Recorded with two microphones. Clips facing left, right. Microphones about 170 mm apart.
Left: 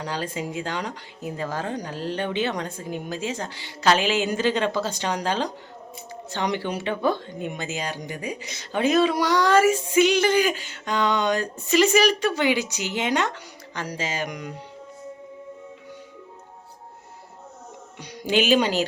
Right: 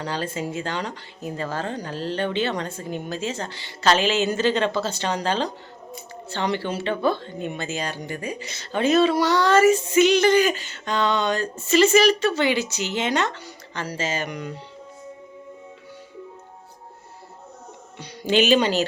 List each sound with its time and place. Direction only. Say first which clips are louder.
0.0 s speech: right 2 dB; 10° left (ahead or behind)
18.0 s speech: right 2 dB; 10° left (ahead or behind)